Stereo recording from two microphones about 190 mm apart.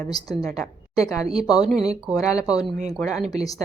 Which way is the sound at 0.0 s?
20° left (ahead or behind).